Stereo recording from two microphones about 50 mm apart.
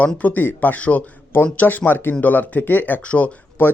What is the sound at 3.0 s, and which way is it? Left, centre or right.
Speech, left.